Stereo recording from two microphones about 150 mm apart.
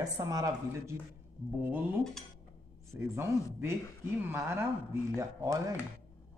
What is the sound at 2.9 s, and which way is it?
Speech, 15° right (ahead or behind).